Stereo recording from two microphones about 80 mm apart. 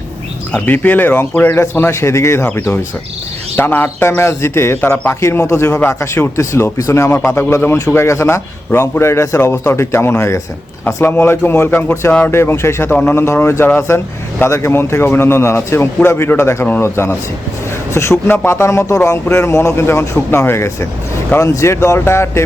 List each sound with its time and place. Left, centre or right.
0.6 s speech: left
1.5 s speech: left